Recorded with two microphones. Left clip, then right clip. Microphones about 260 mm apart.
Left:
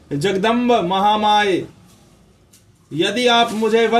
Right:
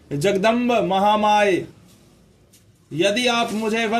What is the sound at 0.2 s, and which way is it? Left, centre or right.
A man's voice, centre.